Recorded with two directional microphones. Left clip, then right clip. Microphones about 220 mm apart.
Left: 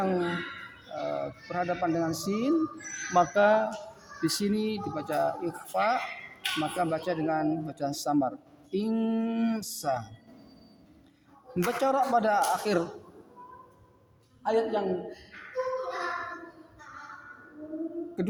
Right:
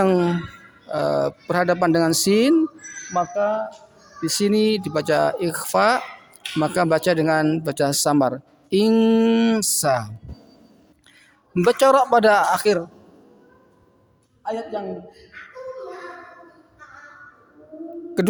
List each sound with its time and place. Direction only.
0.0 s speech: 45° right (ahead or behind)
3.1 s speech: 15° right (ahead or behind)
4.2 s speech: 30° right (ahead or behind)
11.5 s speech: 45° right (ahead or behind)
14.4 s a woman's voice: 30° right (ahead or behind)
18.2 s music: 45° right (ahead or behind)